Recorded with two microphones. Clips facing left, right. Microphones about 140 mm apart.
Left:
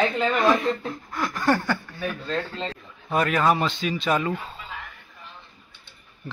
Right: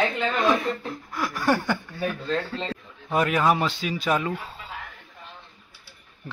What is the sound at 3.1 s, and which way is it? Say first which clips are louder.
Speech: even; 15° right (ahead or behind).